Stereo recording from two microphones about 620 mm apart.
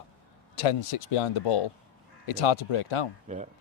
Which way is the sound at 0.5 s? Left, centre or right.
Left.